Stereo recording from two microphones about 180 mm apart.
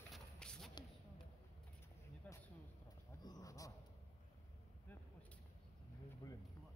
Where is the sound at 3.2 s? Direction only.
20° left (ahead or behind).